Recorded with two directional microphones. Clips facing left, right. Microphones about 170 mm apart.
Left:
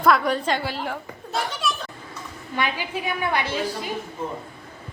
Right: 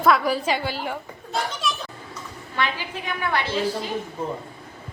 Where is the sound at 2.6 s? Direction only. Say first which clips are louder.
Even; 15° left (ahead or behind).